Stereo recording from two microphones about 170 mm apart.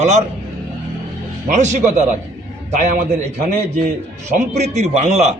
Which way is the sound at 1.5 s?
45° right (ahead or behind).